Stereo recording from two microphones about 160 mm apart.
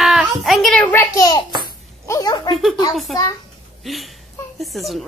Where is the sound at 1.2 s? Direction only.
25° left (ahead or behind).